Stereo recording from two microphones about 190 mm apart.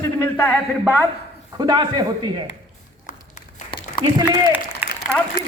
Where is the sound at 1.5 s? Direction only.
20° right (ahead or behind).